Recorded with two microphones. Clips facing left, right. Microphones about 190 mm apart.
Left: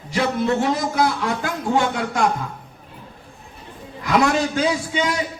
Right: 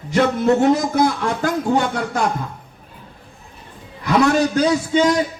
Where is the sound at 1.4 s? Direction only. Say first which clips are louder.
Right 4 dB; 40° right (ahead or behind).